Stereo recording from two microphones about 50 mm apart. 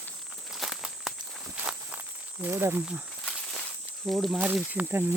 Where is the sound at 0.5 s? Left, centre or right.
Centre.